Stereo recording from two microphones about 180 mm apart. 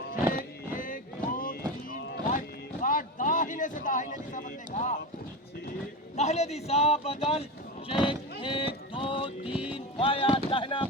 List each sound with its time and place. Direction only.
0.3 s music: 50° left (ahead or behind)
2.8 s a sound: 50° left (ahead or behind)
6.1 s a man's voice: 40° left (ahead or behind)
8.0 s boat: 30° left (ahead or behind)
9.5 s music: 5° right (ahead or behind)
9.7 s music: 30° left (ahead or behind)